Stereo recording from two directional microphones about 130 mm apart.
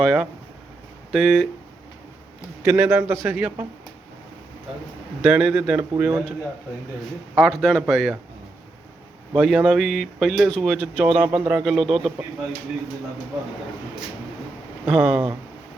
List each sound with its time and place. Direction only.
0.0 s speech: centre (ahead or behind)
2.6 s a man's voice: 15° right (ahead or behind)
5.2 s a man's voice: 5° right (ahead or behind)
7.3 s speech: centre (ahead or behind)
9.3 s speech: 5° right (ahead or behind)
14.8 s a man's voice: 5° right (ahead or behind)